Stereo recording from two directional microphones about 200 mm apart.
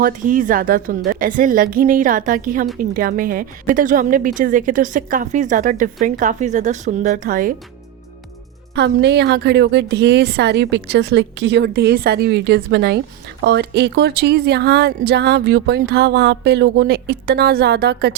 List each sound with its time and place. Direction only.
0.0 s a woman's voice: 40° right (ahead or behind)
8.7 s speech: 60° right (ahead or behind)